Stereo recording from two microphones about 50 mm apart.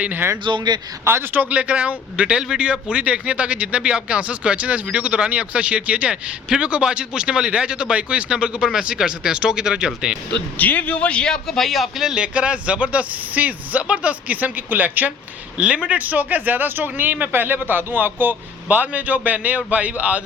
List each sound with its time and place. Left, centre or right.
1.0 s a man's voice: right
1.3 s speech: right; by 10.2 s centre
10.6 s a man's voice: left
11.4 s a man's voice: centre
12.0 s speech: centre; by 15.1 s right
15.5 s speech: right